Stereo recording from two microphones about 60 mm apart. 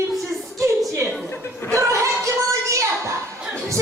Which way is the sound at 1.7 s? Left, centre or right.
Right.